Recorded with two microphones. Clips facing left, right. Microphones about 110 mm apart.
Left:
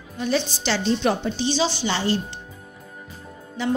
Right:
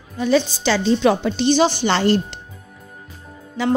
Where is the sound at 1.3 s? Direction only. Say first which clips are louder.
Right 7 dB; 60° right (ahead or behind).